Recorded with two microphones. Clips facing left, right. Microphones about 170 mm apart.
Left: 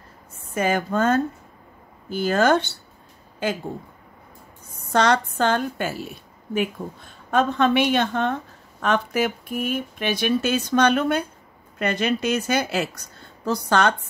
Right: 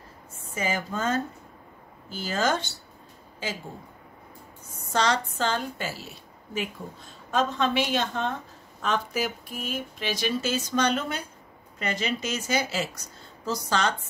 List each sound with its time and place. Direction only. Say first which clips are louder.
0.5 s a woman's voice: left 7 dB; 60° left (ahead or behind)
4.9 s a woman's voice: left 6 dB; 60° left (ahead or behind)